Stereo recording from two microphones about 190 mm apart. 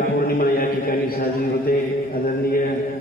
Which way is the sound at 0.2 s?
50° left (ahead or behind).